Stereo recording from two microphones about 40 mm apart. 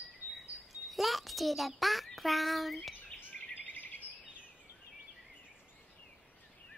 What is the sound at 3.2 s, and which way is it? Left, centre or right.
Bird vocalization, left.